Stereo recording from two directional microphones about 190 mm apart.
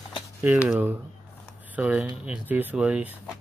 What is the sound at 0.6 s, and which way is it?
Speech, 10° right (ahead or behind).